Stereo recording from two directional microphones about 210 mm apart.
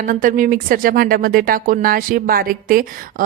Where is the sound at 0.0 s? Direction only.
40° right (ahead or behind).